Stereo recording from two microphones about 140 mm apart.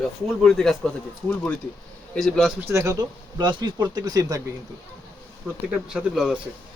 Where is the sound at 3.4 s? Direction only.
30° right (ahead or behind).